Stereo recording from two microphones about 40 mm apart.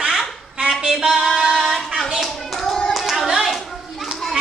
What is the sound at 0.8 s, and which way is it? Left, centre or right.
Music, centre.